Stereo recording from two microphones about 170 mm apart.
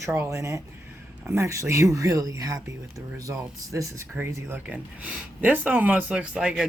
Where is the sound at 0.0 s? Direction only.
15° right (ahead or behind).